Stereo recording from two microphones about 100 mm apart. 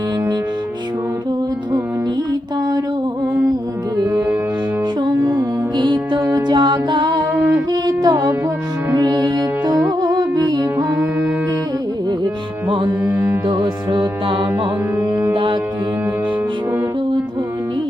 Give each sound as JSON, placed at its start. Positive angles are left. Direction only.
{"t": 4.0, "sound": "music", "side_deg": -40}
{"t": 10.9, "sound": "music", "side_deg": -10}
{"t": 13.5, "sound": "music", "side_deg": -45}
{"t": 14.3, "sound": "music", "side_deg": -60}
{"t": 14.9, "sound": "music", "side_deg": -25}